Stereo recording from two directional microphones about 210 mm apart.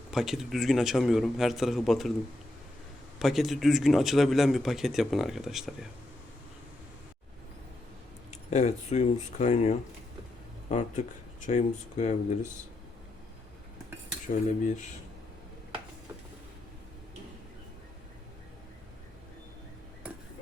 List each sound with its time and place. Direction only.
0.1 s speech: centre (ahead or behind)
3.2 s speech: centre (ahead or behind)
8.3 s speech: 35° left (ahead or behind)